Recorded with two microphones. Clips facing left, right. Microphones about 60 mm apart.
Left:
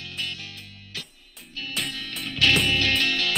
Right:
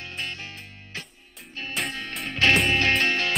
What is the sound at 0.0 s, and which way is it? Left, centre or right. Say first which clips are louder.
Music: right 1 dB; right.